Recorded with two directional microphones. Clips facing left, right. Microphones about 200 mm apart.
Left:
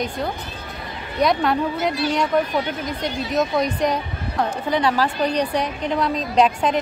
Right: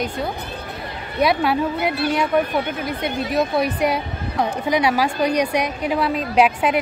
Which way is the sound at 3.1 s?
55° right (ahead or behind).